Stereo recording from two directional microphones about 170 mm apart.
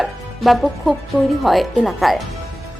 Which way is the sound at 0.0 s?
Centre (ahead or behind).